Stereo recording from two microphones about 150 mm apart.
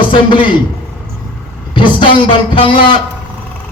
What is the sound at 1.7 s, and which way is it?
A man's voice, 35° left (ahead or behind).